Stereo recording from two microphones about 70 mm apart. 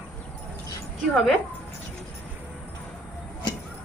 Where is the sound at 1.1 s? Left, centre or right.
Centre.